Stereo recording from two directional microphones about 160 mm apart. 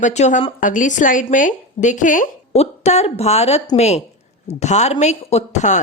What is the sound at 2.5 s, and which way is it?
A woman's voice, 40° left (ahead or behind).